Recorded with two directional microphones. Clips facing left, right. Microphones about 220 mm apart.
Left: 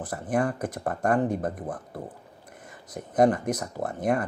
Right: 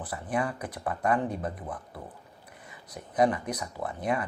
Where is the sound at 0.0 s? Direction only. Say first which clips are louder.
Left 4 dB; 45° left (ahead or behind).